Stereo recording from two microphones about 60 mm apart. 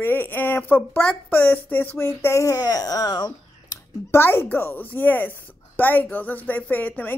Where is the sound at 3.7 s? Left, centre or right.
Left.